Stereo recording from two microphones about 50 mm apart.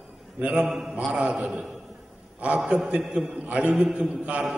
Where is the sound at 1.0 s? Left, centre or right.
Centre.